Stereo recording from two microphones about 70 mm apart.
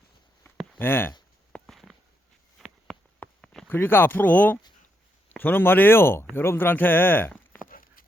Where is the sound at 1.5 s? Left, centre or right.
Centre.